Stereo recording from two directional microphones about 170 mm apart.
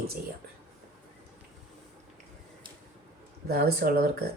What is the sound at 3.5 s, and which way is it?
Speech, 65° right (ahead or behind).